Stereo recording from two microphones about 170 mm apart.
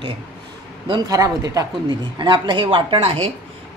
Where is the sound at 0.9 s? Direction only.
25° right (ahead or behind).